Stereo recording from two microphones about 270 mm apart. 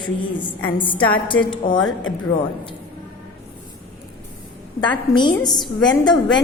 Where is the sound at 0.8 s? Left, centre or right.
Centre.